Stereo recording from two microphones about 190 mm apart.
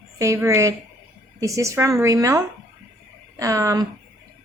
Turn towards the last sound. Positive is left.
turn(degrees=-15)  # may be behind; listen again after turning